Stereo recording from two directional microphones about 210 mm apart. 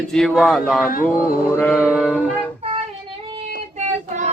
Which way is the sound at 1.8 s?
5° right (ahead or behind).